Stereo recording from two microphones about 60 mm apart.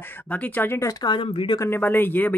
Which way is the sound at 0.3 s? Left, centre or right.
Left.